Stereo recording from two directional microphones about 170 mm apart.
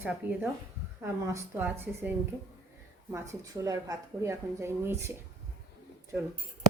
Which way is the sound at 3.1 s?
20° right (ahead or behind).